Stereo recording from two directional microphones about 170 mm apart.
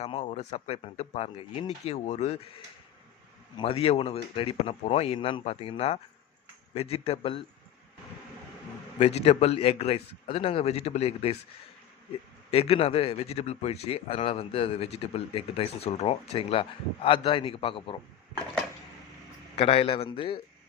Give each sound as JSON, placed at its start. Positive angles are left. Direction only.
{"t": 0.0, "sound": "speech", "side_deg": 40}
{"t": 3.6, "sound": "speech", "side_deg": 35}
{"t": 9.0, "sound": "speech", "side_deg": 40}
{"t": 12.5, "sound": "speech", "side_deg": 35}
{"t": 19.5, "sound": "speech", "side_deg": 35}